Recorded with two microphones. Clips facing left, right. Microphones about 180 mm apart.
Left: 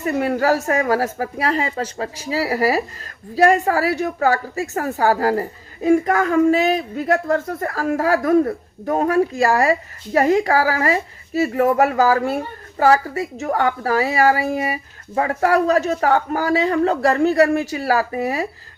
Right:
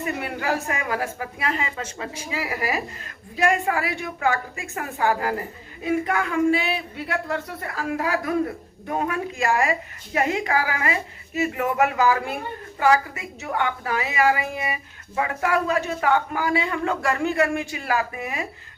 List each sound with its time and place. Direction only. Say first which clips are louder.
0.0 s speech: left 9 dB; 40° left (ahead or behind)